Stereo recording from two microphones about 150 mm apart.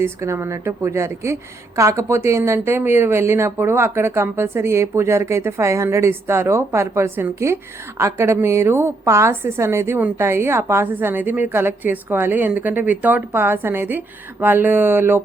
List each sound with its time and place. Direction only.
0.0 s a woman's voice: 20° right (ahead or behind)